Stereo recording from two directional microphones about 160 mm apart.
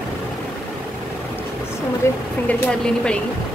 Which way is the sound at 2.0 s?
15° left (ahead or behind).